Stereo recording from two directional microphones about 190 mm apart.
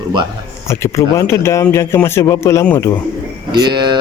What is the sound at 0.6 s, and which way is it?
A man's voice, 15° left (ahead or behind).